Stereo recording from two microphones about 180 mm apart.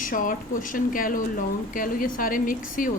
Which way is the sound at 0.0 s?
50° left (ahead or behind).